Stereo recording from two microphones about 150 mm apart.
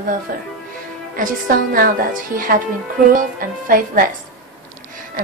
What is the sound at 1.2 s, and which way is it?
A woman's voice, 70° right (ahead or behind).